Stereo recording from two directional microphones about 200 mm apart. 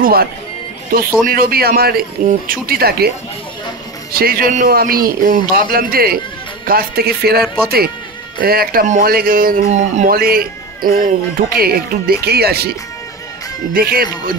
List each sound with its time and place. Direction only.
0.0 s speech: 50° right (ahead or behind)
4.1 s speech: 45° right (ahead or behind)
13.7 s speech: 50° right (ahead or behind)